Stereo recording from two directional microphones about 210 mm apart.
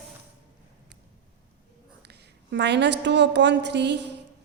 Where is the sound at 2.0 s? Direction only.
55° right (ahead or behind).